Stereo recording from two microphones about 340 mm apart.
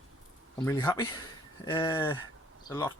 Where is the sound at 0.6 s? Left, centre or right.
Centre.